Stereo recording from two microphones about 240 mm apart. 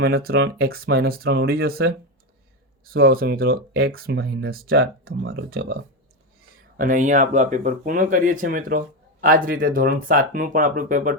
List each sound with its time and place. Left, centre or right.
0.0 s speech: right